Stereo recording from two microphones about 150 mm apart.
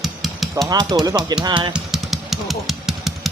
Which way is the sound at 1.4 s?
30° right (ahead or behind).